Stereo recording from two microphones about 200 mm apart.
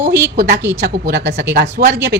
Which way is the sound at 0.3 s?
55° right (ahead or behind).